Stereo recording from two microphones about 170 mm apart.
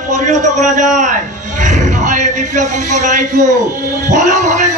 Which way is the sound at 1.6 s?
45° right (ahead or behind).